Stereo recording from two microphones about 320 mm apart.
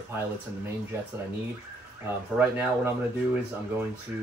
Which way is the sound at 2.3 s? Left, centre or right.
Centre.